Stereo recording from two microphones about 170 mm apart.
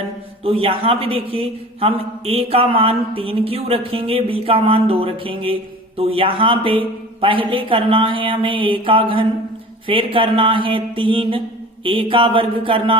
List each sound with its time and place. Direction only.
0.4 s a man's voice: 35° right (ahead or behind)